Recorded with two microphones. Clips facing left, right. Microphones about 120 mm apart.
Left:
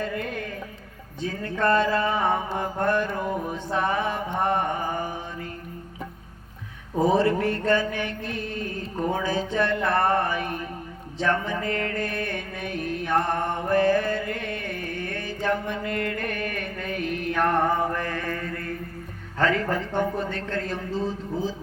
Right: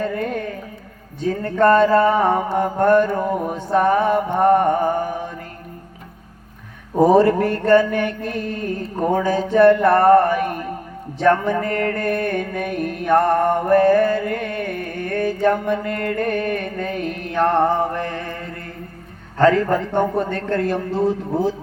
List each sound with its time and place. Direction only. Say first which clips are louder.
0.0 s carnatic music: right 7 dB; 45° right (ahead or behind)
1.2 s music: right 9 dB; 40° right (ahead or behind)
7.0 s music: right 7 dB; 45° right (ahead or behind); by 18.4 s 25° right (ahead or behind)
19.4 s music: right 8 dB; 40° right (ahead or behind); by 21.5 s 65° right (ahead or behind)